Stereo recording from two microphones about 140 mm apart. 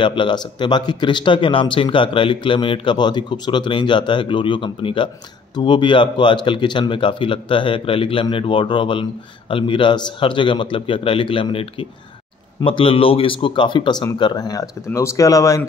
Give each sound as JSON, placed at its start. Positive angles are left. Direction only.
{"t": 0.0, "sound": "speech", "side_deg": 35}
{"t": 12.6, "sound": "speech", "side_deg": 40}